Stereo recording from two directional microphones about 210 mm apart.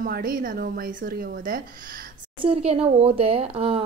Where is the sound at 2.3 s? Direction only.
25° right (ahead or behind).